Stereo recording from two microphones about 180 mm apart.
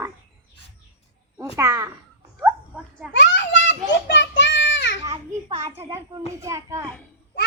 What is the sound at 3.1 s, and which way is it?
Children playing, 75° left (ahead or behind).